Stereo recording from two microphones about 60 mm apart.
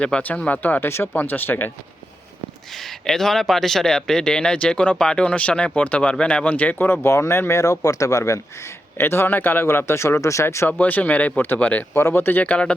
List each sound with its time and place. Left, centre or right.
0.0 s speech: left
1.1 s a man's voice: left
3.1 s speech: centre; by 7.1 s left
7.1 s speech: left
9.0 s a man's voice: left
9.6 s speech: left
10.7 s speech: left
11.9 s a man's voice: left
12.4 s speech: left